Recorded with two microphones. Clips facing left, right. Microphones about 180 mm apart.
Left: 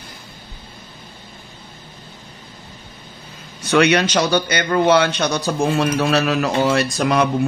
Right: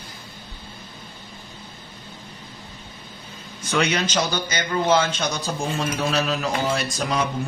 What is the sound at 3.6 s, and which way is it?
A man's voice, 70° left (ahead or behind).